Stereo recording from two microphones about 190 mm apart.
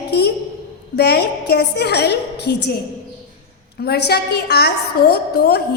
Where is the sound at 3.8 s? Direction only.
55° left (ahead or behind).